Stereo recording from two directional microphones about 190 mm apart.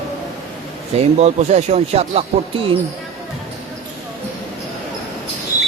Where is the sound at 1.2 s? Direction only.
35° right (ahead or behind).